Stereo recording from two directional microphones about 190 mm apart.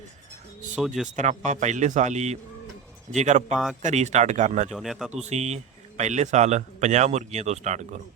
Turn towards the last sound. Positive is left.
turn(degrees=-35)  # may be behind; listen again after turning